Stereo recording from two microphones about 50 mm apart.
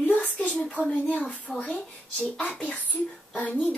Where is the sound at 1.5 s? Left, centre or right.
Right.